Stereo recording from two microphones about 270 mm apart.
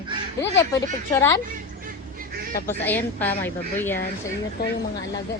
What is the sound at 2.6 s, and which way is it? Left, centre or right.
Speech, centre.